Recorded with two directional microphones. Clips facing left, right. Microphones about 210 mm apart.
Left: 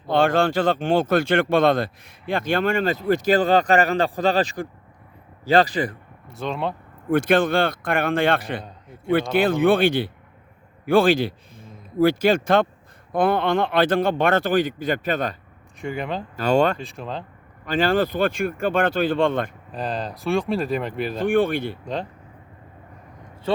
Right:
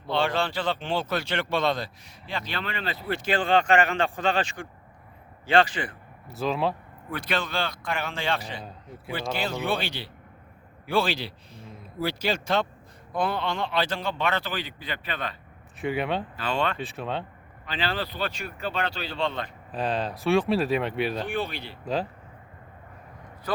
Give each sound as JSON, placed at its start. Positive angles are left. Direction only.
{"t": 0.1, "sound": "a man's voice", "side_deg": 50}
{"t": 6.3, "sound": "speech", "side_deg": 0}
{"t": 7.1, "sound": "a man's voice", "side_deg": 50}
{"t": 15.8, "sound": "speech", "side_deg": -5}
{"t": 16.3, "sound": "speech", "side_deg": 45}
{"t": 16.7, "sound": "speech", "side_deg": 0}
{"t": 17.7, "sound": "speech", "side_deg": 45}
{"t": 19.7, "sound": "speech", "side_deg": 0}
{"t": 21.2, "sound": "speech", "side_deg": 50}